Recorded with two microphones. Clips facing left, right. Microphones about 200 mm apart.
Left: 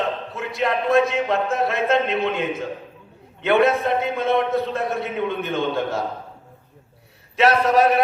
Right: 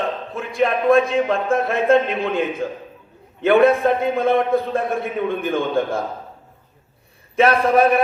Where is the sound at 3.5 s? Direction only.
50° right (ahead or behind).